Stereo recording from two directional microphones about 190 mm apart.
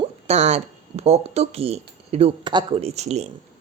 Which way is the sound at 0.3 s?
35° right (ahead or behind).